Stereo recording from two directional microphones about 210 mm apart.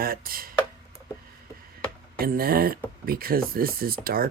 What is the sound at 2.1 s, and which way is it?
Speech, 45° right (ahead or behind).